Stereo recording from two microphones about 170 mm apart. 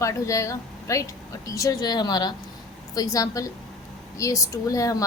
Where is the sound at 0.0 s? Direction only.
20° left (ahead or behind).